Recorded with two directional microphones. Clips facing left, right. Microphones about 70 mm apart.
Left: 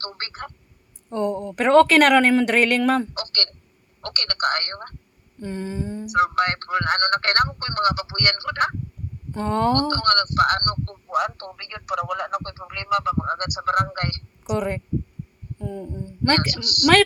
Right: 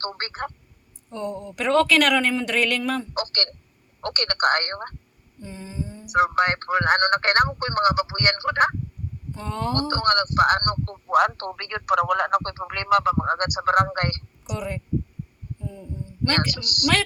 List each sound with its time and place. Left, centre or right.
0.0 s a man's voice: right
1.1 s speech: left
3.2 s a man's voice: right
5.4 s a sound: left
6.1 s a man's voice: right
9.3 s speech: left
9.9 s a man's voice: right
11.1 s speech: right
13.1 s a man's voice: right
14.4 s speech: left
15.5 s a sound: left
16.2 s speech: left